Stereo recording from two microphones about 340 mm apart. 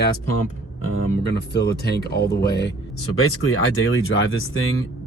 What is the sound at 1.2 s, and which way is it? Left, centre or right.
Speech, left.